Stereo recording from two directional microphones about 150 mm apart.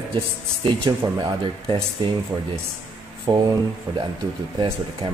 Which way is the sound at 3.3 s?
30° right (ahead or behind).